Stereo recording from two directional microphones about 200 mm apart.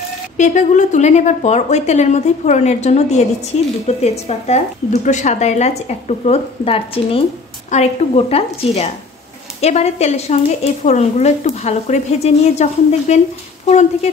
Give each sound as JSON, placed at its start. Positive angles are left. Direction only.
{"t": 0.4, "sound": "speech", "side_deg": 40}